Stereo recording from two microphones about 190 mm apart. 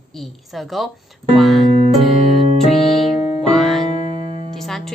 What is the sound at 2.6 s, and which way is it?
Music, centre (ahead or behind).